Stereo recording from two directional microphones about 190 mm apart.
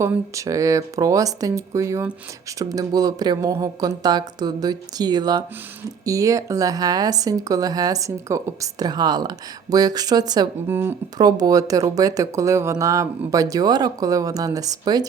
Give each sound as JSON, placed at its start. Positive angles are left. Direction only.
{"t": 0.0, "sound": "speech", "side_deg": -15}